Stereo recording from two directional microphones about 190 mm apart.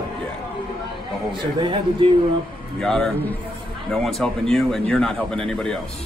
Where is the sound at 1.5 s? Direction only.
25° right (ahead or behind).